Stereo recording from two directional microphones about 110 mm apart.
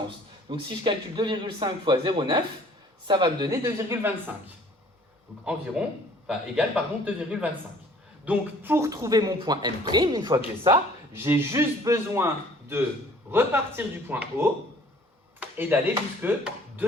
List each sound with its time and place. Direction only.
0.4 s speech: 50° right (ahead or behind)
3.5 s speech: 25° right (ahead or behind)
5.8 s speech: 5° right (ahead or behind)
8.9 s speech: 35° right (ahead or behind)
11.1 s speech: 20° right (ahead or behind)
15.4 s a sound: 20° right (ahead or behind)
16.2 s chopping: 15° right (ahead or behind)